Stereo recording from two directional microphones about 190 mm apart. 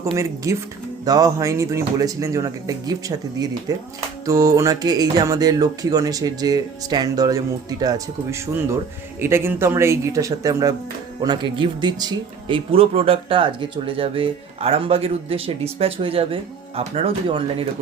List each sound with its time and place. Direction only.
0.0 s speech: 15° right (ahead or behind)